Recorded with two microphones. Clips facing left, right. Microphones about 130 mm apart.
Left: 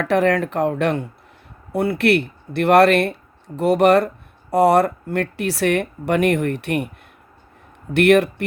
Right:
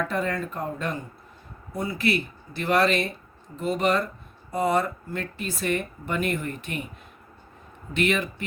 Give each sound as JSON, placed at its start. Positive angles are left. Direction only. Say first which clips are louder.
{"t": 0.0, "sound": "speech", "louder": "left 10 dB", "side_deg": 80}
{"t": 7.9, "sound": "speech", "louder": "left 11 dB", "side_deg": 70}